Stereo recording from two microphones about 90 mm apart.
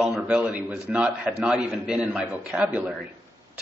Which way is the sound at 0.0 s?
5° right (ahead or behind).